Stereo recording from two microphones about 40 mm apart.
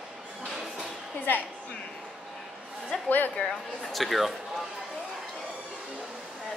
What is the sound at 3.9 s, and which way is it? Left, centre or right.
Speech, centre.